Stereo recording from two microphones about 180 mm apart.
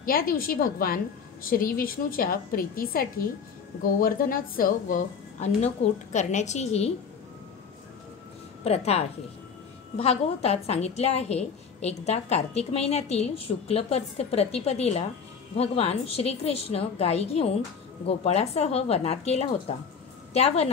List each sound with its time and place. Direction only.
0.0 s a woman's voice: 55° left (ahead or behind); by 6.9 s 35° left (ahead or behind)
8.6 s a woman's voice: 35° left (ahead or behind)